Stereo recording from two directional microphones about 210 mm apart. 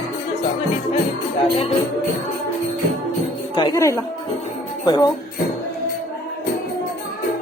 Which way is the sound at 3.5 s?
20° left (ahead or behind).